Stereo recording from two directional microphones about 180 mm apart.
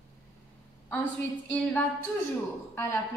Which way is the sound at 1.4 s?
10° left (ahead or behind).